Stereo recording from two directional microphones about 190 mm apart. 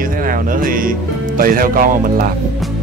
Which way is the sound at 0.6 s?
45° right (ahead or behind).